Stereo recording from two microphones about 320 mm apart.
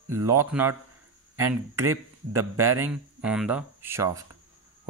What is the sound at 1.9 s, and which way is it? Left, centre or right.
Speech, centre.